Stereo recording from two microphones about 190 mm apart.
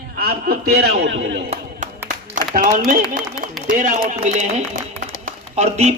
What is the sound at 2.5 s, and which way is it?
A man's voice, 40° right (ahead or behind).